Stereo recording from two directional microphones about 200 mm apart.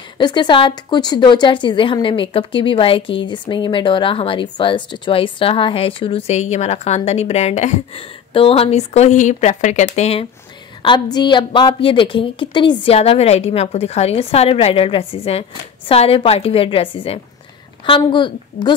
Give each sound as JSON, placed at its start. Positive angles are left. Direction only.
{"t": 0.2, "sound": "a woman's voice", "side_deg": 20}
{"t": 10.8, "sound": "a woman's voice", "side_deg": 25}